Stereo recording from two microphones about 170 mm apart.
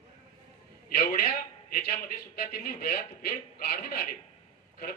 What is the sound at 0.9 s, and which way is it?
A man's voice, 55° left (ahead or behind).